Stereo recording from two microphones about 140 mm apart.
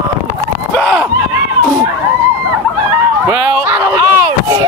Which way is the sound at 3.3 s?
15° right (ahead or behind).